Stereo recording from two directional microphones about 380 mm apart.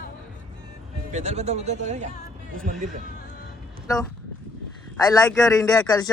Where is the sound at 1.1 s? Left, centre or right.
Centre.